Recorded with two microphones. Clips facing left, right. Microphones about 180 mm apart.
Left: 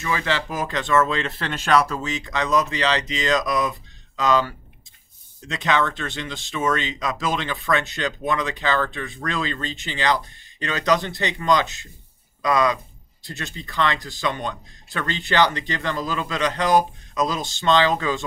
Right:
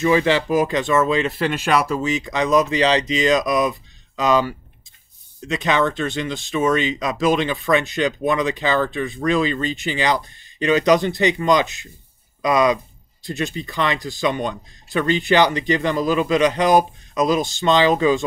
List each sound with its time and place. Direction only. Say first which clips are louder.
0.0 s speech: right 8 dB; 20° right (ahead or behind)